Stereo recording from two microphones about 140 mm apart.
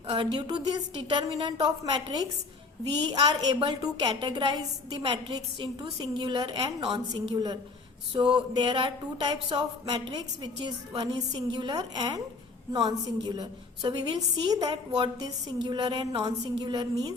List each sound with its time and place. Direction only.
0.1 s a woman's voice: 35° right (ahead or behind)